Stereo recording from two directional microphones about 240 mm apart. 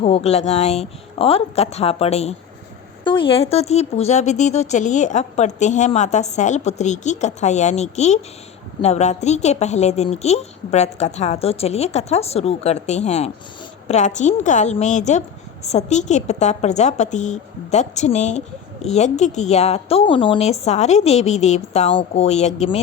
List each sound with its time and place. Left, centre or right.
0.0 s speech: left